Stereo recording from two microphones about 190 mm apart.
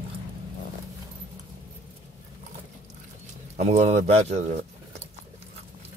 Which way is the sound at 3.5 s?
35° right (ahead or behind).